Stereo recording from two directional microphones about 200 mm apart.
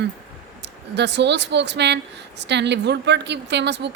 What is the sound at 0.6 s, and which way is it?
A woman's voice, 60° right (ahead or behind).